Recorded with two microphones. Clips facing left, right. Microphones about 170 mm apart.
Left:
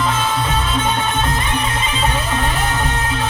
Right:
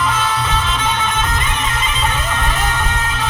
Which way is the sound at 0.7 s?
30° left (ahead or behind).